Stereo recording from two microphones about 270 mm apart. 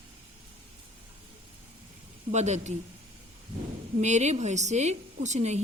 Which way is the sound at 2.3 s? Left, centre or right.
Right.